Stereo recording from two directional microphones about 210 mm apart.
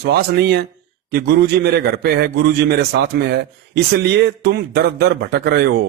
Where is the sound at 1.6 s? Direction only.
50° right (ahead or behind).